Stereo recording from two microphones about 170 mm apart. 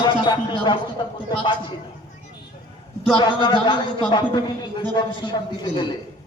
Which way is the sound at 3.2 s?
25° left (ahead or behind).